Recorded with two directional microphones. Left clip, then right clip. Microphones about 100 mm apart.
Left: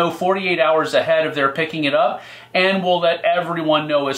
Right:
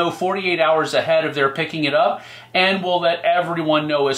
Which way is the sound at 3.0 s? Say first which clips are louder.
Even; 45° left (ahead or behind).